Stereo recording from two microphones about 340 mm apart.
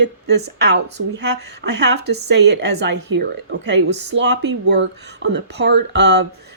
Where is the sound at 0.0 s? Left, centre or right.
Right.